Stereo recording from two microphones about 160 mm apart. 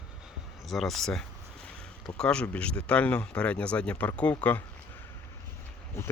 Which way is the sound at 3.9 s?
20° left (ahead or behind).